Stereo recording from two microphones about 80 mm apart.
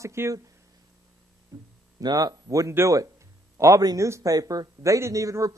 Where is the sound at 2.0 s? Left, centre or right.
Right.